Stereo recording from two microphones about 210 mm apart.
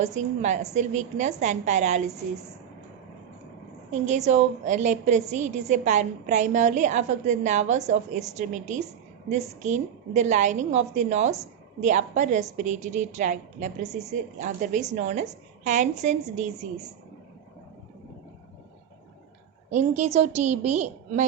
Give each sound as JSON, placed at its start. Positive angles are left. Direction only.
{"t": 0.0, "sound": "a woman's voice", "side_deg": -35}
{"t": 4.0, "sound": "a woman's voice", "side_deg": -35}
{"t": 19.7, "sound": "a woman's voice", "side_deg": -30}